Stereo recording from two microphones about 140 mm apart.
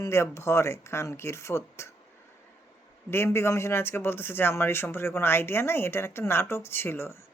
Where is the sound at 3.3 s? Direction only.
20° left (ahead or behind).